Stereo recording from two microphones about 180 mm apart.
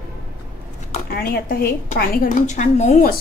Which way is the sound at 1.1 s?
60° left (ahead or behind).